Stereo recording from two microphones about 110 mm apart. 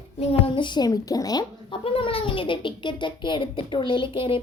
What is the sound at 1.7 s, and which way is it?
Speech, 55° left (ahead or behind).